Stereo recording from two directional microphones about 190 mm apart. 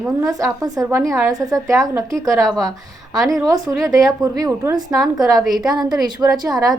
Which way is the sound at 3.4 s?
20° right (ahead or behind).